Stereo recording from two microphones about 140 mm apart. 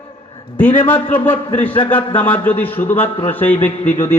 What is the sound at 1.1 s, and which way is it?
A man's voice, 15° left (ahead or behind).